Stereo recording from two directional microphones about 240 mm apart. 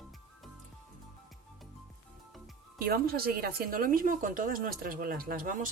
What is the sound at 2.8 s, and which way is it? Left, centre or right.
A woman's voice, right.